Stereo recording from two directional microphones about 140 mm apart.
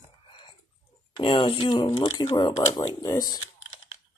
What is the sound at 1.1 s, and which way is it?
Speech, 35° left (ahead or behind).